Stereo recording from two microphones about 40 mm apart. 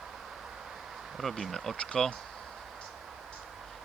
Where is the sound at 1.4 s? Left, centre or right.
Centre.